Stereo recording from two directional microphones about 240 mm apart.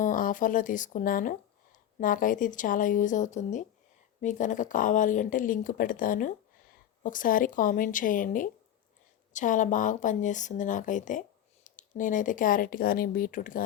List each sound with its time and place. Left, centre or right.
0.0 s speech: left